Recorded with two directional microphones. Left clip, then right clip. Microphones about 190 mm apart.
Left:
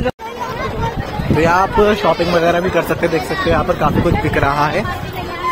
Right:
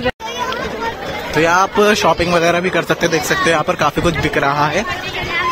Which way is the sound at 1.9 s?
20° right (ahead or behind).